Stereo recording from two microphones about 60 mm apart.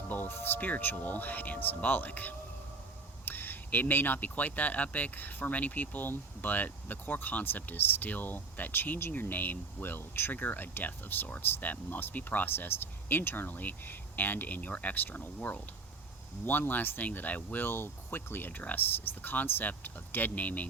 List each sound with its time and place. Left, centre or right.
0.1 s speech: left